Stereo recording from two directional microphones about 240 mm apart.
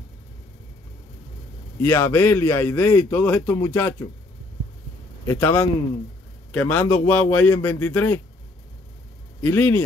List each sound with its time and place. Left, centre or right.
1.8 s a man's voice: centre
5.2 s a man's voice: centre
9.4 s a man's voice: centre